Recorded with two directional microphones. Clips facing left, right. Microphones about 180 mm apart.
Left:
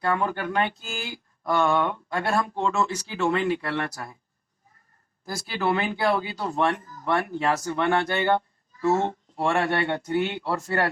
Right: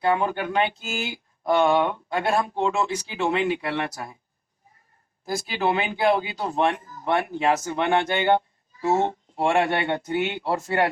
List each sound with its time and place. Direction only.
0.0 s speech: 20° right (ahead or behind)
5.2 s speech: 25° right (ahead or behind)